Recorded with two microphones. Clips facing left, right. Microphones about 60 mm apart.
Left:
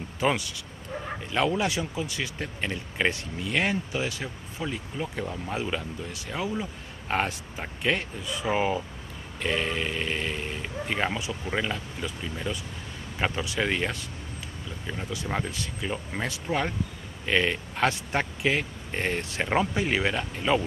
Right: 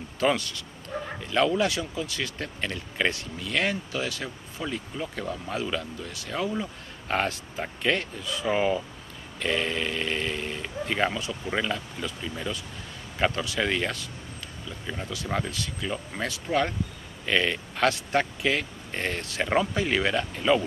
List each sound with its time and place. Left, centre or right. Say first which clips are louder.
0.2 s speech: right 1 dB; centre
15.2 s speech: right 1 dB; centre
15.5 s speech: even; left
16.4 s speech: right 3 dB; centre